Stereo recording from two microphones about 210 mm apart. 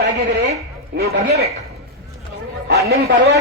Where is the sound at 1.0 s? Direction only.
50° right (ahead or behind).